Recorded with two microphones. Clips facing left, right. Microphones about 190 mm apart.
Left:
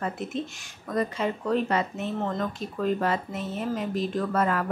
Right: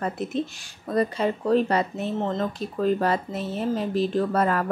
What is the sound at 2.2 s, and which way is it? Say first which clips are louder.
Speech: right 3 dB; 20° right (ahead or behind).